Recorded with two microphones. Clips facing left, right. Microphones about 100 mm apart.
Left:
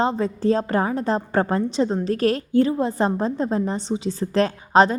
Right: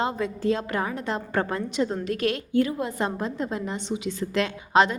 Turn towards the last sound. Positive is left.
turn(degrees=35)  # may be behind; listen again after turning